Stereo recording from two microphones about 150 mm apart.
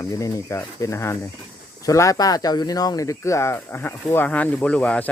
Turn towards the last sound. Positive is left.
turn(degrees=10)  # may be behind; listen again after turning